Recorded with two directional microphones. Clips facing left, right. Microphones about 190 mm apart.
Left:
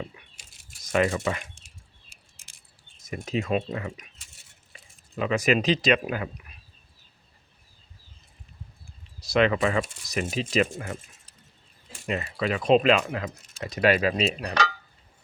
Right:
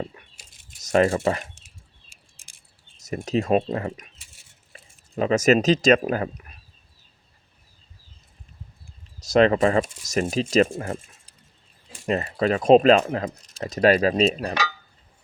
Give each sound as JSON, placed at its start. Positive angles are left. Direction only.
{"t": 0.8, "sound": "speech", "side_deg": -45}
{"t": 3.0, "sound": "speech", "side_deg": -40}
{"t": 9.2, "sound": "speech", "side_deg": -40}
{"t": 12.0, "sound": "speech", "side_deg": -40}